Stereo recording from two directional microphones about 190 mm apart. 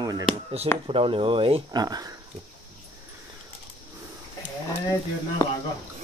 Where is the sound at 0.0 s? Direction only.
20° right (ahead or behind).